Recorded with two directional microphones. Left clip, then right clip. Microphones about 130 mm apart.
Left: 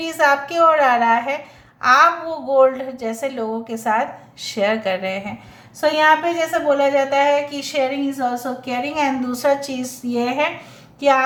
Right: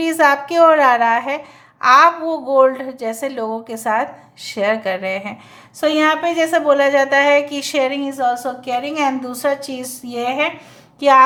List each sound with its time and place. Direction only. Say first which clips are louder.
0.0 s a woman's voice: right 3 dB; 45° right (ahead or behind)
5.8 s a woman's voice: left 1 dB; 65° right (ahead or behind)
8.8 s a woman's voice: left 2 dB; 45° right (ahead or behind); by 9.9 s 30° right (ahead or behind)
10.1 s a woman's voice: right 1 dB; 45° right (ahead or behind)